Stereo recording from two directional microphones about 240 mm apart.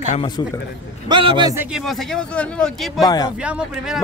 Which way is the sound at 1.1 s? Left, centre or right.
Centre.